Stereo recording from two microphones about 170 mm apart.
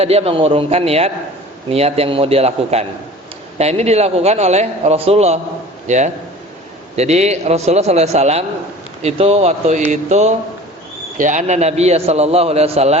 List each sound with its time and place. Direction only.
0.0 s a man's voice: 35° right (ahead or behind)